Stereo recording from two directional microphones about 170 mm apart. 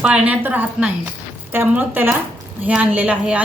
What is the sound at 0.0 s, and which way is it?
A woman's voice, 5° right (ahead or behind).